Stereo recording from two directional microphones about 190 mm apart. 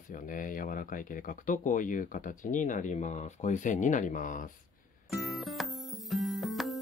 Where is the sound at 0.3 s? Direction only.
45° left (ahead or behind).